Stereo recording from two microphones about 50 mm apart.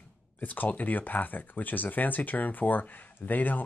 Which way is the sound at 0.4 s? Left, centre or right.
Left.